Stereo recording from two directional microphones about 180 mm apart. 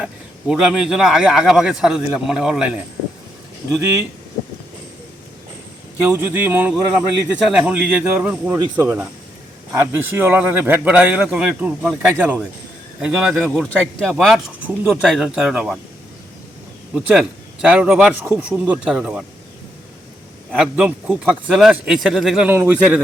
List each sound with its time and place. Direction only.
0.0 s a man's voice: 5° right (ahead or behind)
3.7 s a man's voice: 15° right (ahead or behind)
6.1 s a man's voice: 10° right (ahead or behind)
16.9 s a man's voice: 5° right (ahead or behind)
20.5 s a man's voice: 5° right (ahead or behind)